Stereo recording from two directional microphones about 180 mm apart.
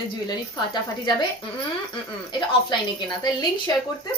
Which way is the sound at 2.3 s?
25° left (ahead or behind).